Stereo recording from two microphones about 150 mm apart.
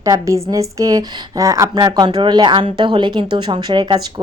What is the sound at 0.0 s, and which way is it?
A woman's voice, 20° right (ahead or behind).